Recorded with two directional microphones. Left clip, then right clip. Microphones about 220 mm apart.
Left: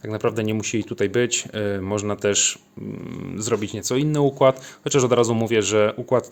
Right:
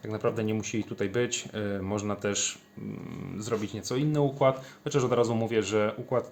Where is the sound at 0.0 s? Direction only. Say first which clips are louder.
Left 6 dB; 45° left (ahead or behind).